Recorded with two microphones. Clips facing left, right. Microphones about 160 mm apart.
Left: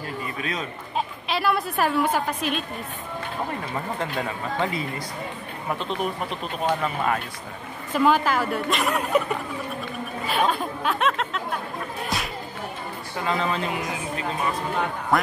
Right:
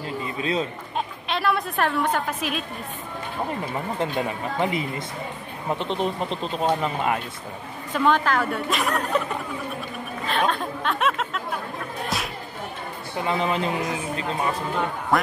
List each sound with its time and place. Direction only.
0.2 s chatter: 30° right (ahead or behind)
0.9 s a woman's voice: centre (ahead or behind)
4.0 s speech: 20° right (ahead or behind)
7.9 s a woman's voice: 5° left (ahead or behind)
10.2 s chatter: 10° left (ahead or behind)
13.2 s speech: 20° right (ahead or behind)